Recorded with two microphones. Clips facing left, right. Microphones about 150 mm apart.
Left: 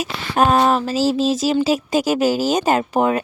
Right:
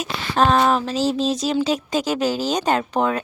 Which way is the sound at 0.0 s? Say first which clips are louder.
Left 1 dB; 10° left (ahead or behind).